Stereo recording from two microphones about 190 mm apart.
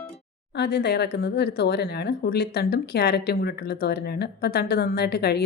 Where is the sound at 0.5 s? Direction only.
60° left (ahead or behind).